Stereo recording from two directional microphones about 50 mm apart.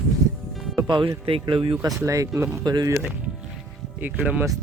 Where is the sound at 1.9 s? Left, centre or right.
Right.